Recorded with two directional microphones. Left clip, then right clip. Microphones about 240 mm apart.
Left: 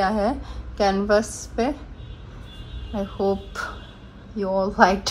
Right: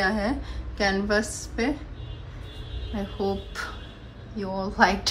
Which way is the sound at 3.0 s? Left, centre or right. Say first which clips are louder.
Left 5 dB; centre.